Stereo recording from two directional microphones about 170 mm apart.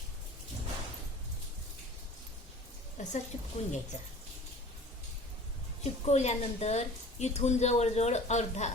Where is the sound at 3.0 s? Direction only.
45° left (ahead or behind).